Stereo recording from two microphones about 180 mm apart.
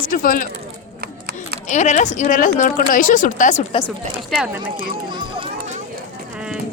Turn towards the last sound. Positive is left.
turn(degrees=-25)  # may be behind; listen again after turning